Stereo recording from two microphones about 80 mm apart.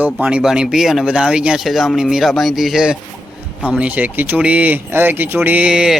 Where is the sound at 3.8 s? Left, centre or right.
Centre.